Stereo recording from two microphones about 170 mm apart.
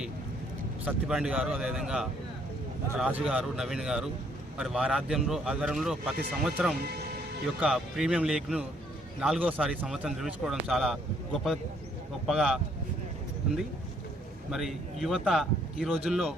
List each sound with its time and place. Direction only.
0.9 s speech: 5° right (ahead or behind)
6.7 s speech: 65° right (ahead or behind)
7.6 s speech: 5° right (ahead or behind)
12.2 s speech: 5° right (ahead or behind)
14.5 s speech: centre (ahead or behind)